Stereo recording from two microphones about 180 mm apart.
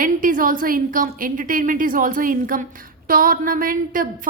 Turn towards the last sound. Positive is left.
turn(degrees=-50)  # may be behind; listen again after turning